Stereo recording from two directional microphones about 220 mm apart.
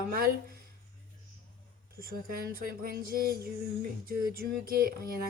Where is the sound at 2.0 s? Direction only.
40° right (ahead or behind).